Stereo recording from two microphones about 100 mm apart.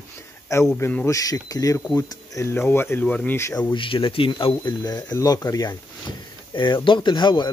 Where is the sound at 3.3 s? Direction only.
25° left (ahead or behind).